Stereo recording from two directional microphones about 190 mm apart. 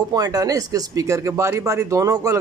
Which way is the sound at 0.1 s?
20° right (ahead or behind).